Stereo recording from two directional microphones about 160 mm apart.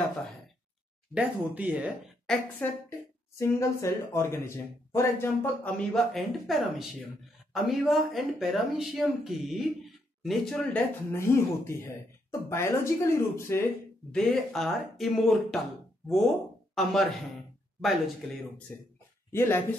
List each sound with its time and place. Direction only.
1.1 s speech: 10° right (ahead or behind)
2.2 s speech: 5° left (ahead or behind)
3.3 s speech: 15° left (ahead or behind)
6.1 s speech: centre (ahead or behind)
11.1 s speech: 15° left (ahead or behind)
14.1 s speech: centre (ahead or behind)
16.7 s speech: centre (ahead or behind)
19.3 s speech: 15° left (ahead or behind)